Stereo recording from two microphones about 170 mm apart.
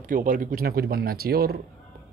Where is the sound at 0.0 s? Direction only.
55° right (ahead or behind).